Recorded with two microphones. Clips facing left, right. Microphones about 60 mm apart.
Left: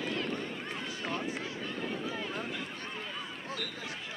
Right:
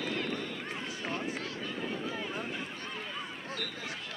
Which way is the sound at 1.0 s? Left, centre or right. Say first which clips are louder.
Even; centre.